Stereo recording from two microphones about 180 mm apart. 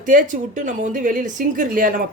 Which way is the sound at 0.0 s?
45° right (ahead or behind).